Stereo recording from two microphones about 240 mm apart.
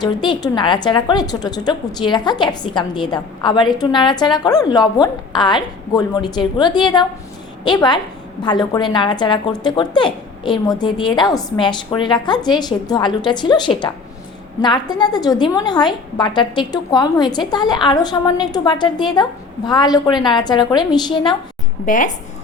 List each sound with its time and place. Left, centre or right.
0.0 s a woman's voice: centre
21.8 s speech: left